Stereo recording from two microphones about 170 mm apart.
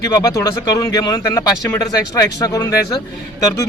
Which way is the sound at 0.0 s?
20° left (ahead or behind).